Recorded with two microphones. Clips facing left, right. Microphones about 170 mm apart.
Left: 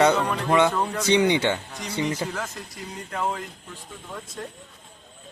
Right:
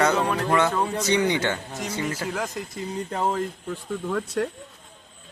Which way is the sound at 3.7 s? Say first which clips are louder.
Right 13 dB; 75° right (ahead or behind).